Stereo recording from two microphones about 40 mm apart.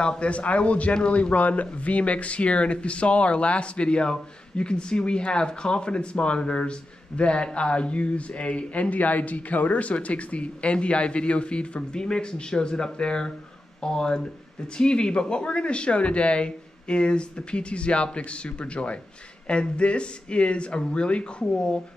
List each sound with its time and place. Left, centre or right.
0.0 s a man's voice: left